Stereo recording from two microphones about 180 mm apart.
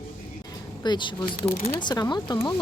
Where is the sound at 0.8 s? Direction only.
25° left (ahead or behind).